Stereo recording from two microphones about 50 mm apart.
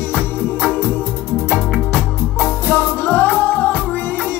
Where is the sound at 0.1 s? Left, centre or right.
Left.